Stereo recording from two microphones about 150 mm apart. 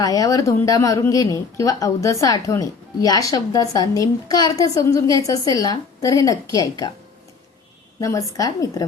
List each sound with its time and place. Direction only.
0.0 s speech: 25° left (ahead or behind)
8.0 s speech: 20° left (ahead or behind)